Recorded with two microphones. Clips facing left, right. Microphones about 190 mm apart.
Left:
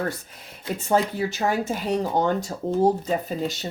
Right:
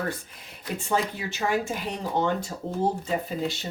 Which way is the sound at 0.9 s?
40° left (ahead or behind).